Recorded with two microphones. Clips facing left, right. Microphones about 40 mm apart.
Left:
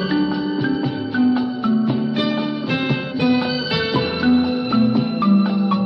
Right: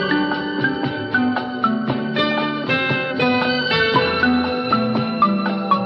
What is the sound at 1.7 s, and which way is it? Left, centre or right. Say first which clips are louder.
Music: left 1 dB; centre.